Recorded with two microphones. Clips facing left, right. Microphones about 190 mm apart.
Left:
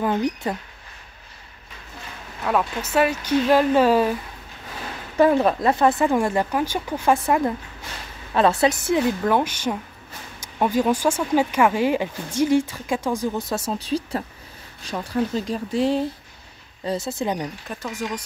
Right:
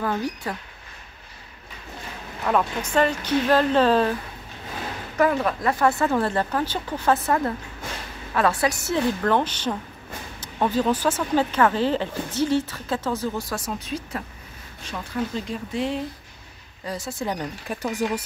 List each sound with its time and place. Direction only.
0.0 s speech: 20° left (ahead or behind)
2.4 s speech: 5° left (ahead or behind)
5.1 s speech: 30° left (ahead or behind)
16.8 s speech: 25° left (ahead or behind)
17.6 s speech: 10° right (ahead or behind)